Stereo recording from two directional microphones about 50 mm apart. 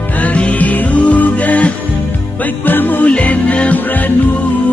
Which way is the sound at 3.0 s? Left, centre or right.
Left.